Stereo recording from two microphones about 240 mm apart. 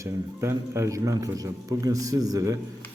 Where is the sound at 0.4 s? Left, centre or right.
Centre.